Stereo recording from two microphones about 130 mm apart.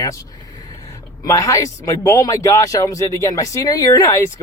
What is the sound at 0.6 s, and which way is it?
Speech, 25° left (ahead or behind).